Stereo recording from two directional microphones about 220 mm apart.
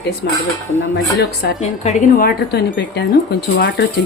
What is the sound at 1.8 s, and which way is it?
Speech, 30° left (ahead or behind).